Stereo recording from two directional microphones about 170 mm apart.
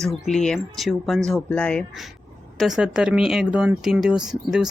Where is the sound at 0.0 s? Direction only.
5° left (ahead or behind).